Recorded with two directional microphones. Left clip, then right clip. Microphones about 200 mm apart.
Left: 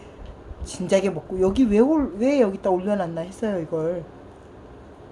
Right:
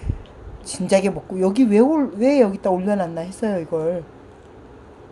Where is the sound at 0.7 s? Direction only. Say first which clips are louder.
Right 3 dB; 15° right (ahead or behind).